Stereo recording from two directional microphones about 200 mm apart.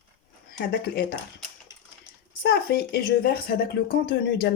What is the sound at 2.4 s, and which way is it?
A woman's voice, 50° left (ahead or behind).